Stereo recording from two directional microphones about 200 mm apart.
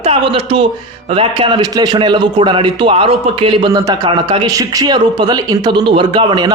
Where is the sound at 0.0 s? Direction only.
25° right (ahead or behind).